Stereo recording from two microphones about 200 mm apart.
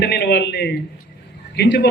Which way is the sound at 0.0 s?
55° left (ahead or behind).